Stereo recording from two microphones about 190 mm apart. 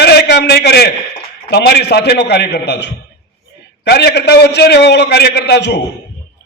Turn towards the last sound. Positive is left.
turn(degrees=65)  # may be behind; listen again after turning